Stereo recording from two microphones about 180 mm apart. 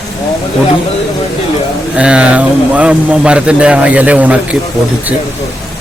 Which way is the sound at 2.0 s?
5° right (ahead or behind).